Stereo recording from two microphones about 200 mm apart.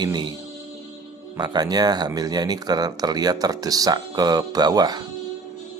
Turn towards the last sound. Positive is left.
turn(degrees=-20)  # may be behind; listen again after turning